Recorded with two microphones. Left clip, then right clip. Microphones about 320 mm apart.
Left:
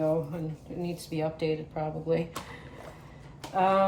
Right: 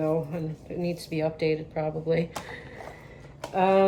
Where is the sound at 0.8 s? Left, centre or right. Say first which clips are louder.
Right 4 dB; left.